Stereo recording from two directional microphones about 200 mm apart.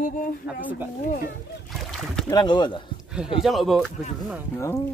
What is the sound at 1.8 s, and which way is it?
Boat, centre (ahead or behind).